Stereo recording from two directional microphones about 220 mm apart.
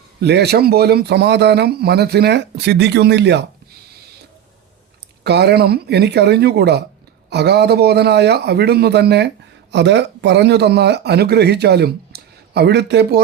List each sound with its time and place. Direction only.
0.2 s speech: 50° right (ahead or behind)
5.2 s speech: 50° right (ahead or behind)